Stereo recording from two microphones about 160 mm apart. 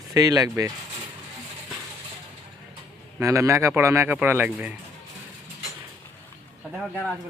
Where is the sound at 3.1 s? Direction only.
20° right (ahead or behind).